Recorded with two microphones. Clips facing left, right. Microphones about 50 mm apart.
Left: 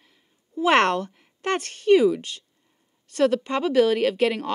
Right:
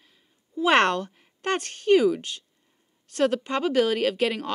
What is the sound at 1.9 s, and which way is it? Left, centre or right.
Speech, right.